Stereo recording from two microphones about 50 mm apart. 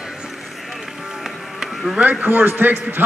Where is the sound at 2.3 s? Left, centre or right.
Right.